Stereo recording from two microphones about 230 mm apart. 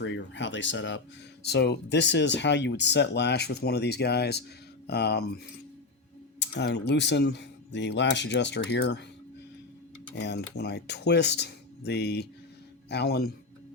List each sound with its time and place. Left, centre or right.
0.0 s speech: left
6.4 s speech: left
10.2 s speech: left